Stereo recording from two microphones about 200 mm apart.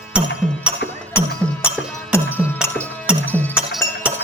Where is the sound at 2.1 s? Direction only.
10° left (ahead or behind).